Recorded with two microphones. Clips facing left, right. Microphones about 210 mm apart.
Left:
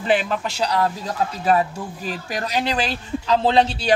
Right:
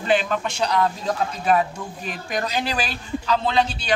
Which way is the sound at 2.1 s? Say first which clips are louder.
Right 1 dB; 30° left (ahead or behind).